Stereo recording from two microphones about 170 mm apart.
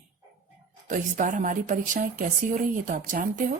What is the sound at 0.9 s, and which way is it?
A woman's voice, 50° right (ahead or behind).